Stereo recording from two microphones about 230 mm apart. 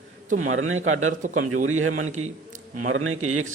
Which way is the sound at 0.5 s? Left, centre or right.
Right.